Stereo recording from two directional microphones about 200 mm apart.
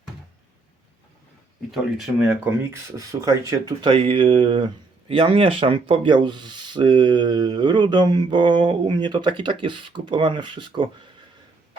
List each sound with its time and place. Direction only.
1.7 s speech: 5° right (ahead or behind); by 10.8 s 25° right (ahead or behind)